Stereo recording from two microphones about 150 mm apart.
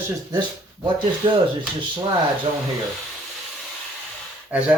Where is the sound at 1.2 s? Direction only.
30° right (ahead or behind).